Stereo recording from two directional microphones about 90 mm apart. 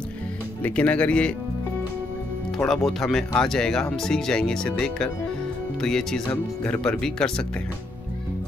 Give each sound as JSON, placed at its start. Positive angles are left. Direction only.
{"t": 0.6, "sound": "speech", "side_deg": 20}
{"t": 2.5, "sound": "speech", "side_deg": 0}
{"t": 6.2, "sound": "speech", "side_deg": 20}